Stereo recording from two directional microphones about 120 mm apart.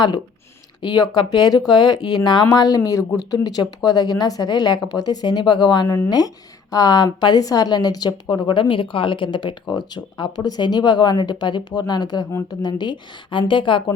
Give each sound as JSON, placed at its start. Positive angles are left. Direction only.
{"t": 0.8, "sound": "a woman's voice", "side_deg": 35}